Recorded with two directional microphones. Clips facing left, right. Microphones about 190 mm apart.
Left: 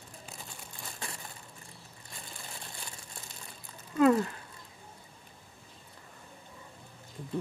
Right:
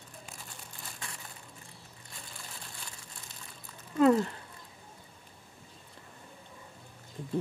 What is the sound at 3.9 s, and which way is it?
Speech, 25° right (ahead or behind).